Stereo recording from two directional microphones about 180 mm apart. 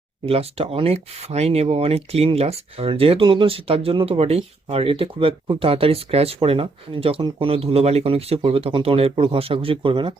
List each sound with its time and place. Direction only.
0.3 s speech: 30° right (ahead or behind)